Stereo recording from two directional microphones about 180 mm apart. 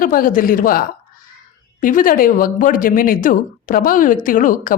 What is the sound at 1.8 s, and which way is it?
Speech, 50° left (ahead or behind).